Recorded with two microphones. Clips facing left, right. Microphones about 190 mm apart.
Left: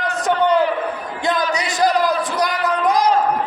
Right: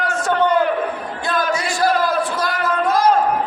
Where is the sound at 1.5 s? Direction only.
20° left (ahead or behind).